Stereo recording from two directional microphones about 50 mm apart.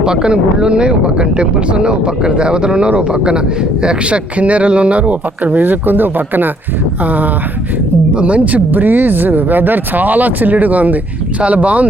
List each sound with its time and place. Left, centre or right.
0.0 s speech: centre